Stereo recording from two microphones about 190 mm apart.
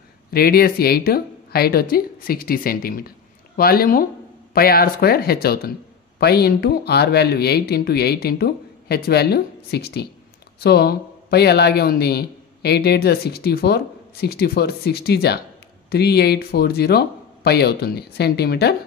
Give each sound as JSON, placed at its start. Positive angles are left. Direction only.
{"t": 0.3, "sound": "speech", "side_deg": 55}